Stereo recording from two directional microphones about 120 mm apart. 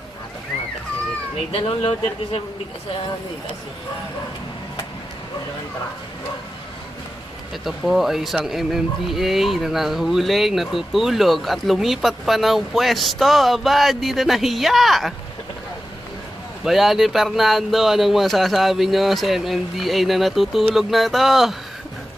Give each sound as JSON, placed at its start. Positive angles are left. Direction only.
{"t": 1.5, "sound": "speech", "side_deg": 45}
{"t": 7.5, "sound": "speech", "side_deg": 0}
{"t": 16.6, "sound": "speech", "side_deg": 0}